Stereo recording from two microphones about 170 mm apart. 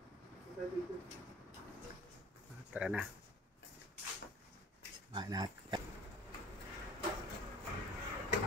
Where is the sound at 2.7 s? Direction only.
5° right (ahead or behind).